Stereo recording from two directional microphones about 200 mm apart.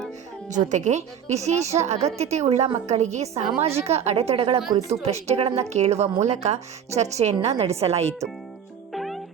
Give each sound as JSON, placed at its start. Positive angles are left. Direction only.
{"t": 0.4, "sound": "a woman's voice", "side_deg": -40}
{"t": 8.9, "sound": "cat", "side_deg": 0}